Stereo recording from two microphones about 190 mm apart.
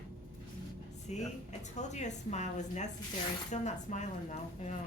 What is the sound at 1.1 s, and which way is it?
A woman's voice, 35° left (ahead or behind).